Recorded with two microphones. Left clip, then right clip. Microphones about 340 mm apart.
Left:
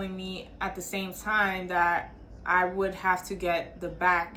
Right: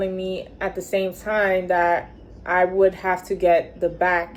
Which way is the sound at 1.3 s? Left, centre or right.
Right.